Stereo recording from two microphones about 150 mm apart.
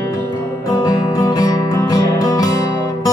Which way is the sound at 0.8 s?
25° left (ahead or behind).